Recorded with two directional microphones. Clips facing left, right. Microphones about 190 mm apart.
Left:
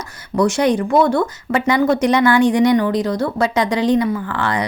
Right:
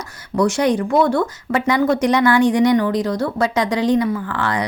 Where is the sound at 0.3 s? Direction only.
20° left (ahead or behind).